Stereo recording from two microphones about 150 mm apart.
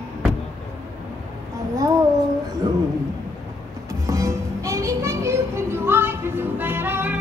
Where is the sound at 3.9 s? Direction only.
20° right (ahead or behind).